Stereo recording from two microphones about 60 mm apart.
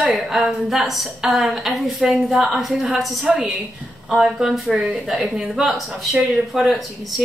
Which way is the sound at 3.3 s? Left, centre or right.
Centre.